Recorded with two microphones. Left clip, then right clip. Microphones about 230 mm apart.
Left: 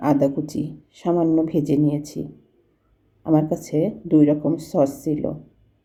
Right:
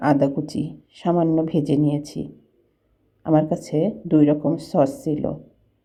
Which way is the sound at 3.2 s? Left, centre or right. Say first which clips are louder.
Right 1 dB; centre.